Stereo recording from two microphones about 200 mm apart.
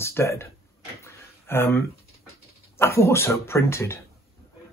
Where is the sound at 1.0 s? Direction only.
15° left (ahead or behind).